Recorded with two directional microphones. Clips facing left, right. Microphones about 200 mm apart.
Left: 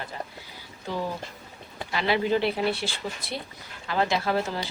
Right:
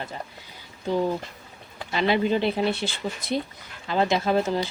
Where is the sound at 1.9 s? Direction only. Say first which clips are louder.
Right 2 dB; 20° right (ahead or behind).